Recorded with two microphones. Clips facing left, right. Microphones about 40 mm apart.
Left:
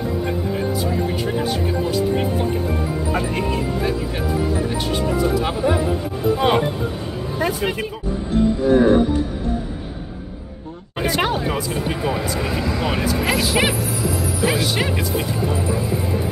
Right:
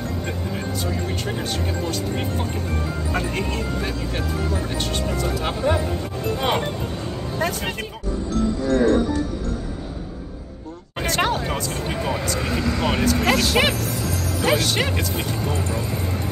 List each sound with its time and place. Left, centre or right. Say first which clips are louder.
0.0 s music: left 5 dB; centre
11.0 s vehicle: left 2 dB; centre